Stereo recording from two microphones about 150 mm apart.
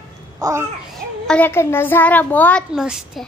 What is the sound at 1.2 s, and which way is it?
A child's voice, 10° left (ahead or behind).